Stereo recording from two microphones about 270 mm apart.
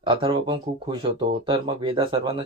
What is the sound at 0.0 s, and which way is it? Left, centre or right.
Speech, centre.